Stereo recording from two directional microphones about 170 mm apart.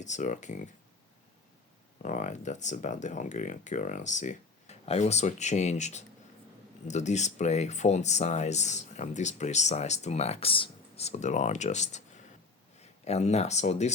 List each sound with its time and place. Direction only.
0.0 s speech: 45° left (ahead or behind)
2.0 s speech: 45° left (ahead or behind)